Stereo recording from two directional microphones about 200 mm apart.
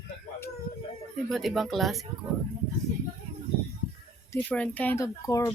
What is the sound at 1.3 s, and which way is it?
Speech, centre (ahead or behind).